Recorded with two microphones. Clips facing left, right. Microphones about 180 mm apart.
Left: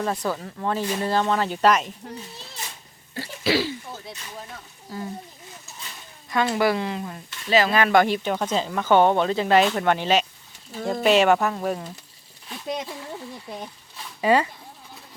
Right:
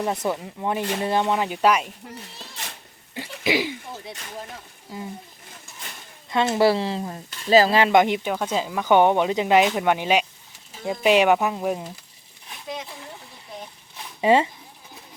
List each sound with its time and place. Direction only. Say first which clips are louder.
0.0 s speech: right 1 dB; 20° right (ahead or behind)
3.2 s throat clearing: left 1 dB; 15° right (ahead or behind)
4.9 s speech: left 2 dB; 20° right (ahead or behind)
6.3 s speech: right 3 dB; 25° right (ahead or behind)
8.3 s speech: left 1 dB; 5° right (ahead or behind)
14.2 s speech: right 2 dB; 25° right (ahead or behind)